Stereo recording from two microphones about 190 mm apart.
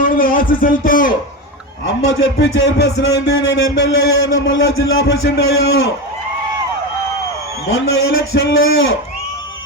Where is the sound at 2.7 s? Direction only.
60° left (ahead or behind).